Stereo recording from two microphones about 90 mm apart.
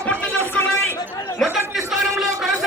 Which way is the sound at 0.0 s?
15° left (ahead or behind).